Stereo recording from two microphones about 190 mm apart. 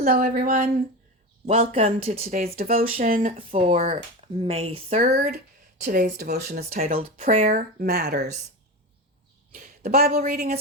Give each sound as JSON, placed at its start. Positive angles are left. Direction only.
{"t": 0.0, "sound": "speech", "side_deg": -50}
{"t": 1.5, "sound": "speech", "side_deg": -30}
{"t": 2.7, "sound": "speech", "side_deg": -45}
{"t": 3.5, "sound": "speech", "side_deg": -30}
{"t": 5.0, "sound": "speech", "side_deg": -45}
{"t": 6.7, "sound": "speech", "side_deg": -40}
{"t": 9.6, "sound": "a sound", "side_deg": -50}
{"t": 10.3, "sound": "speech", "side_deg": -55}